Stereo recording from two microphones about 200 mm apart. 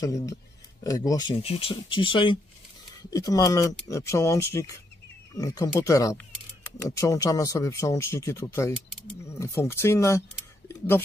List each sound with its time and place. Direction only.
0.0 s speech: 15° left (ahead or behind)